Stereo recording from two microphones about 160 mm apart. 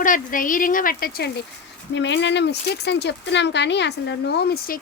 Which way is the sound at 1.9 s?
90° left.